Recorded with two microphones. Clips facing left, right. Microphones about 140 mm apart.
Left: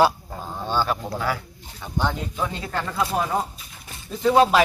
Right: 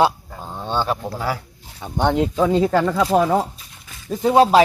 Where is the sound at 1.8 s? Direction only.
60° right (ahead or behind); by 3.4 s 90° right.